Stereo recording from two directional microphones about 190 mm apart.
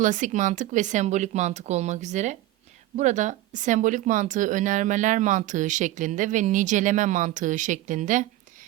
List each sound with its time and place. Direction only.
0.0 s speech: 40° right (ahead or behind)